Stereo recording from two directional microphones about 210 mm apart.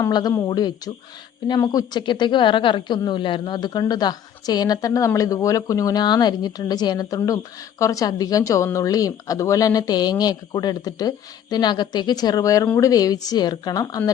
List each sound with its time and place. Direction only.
0.0 s a woman's voice: 20° left (ahead or behind)